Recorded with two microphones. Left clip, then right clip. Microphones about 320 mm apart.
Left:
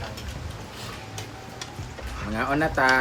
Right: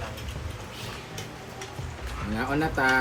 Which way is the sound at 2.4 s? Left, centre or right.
Centre.